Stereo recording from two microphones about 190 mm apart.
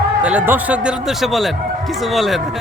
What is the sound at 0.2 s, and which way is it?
Speech, 5° right (ahead or behind).